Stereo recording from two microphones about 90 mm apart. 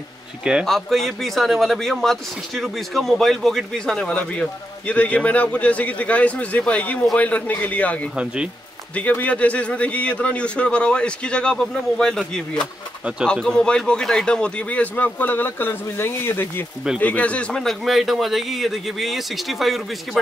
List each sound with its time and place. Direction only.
0.4 s speech: 10° right (ahead or behind)
0.7 s speech: 5° left (ahead or behind); by 16.6 s 25° left (ahead or behind)
17.0 s a man's voice: 15° left (ahead or behind); by 19.8 s centre (ahead or behind)